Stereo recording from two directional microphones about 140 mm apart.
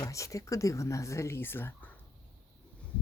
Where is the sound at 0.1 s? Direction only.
20° left (ahead or behind).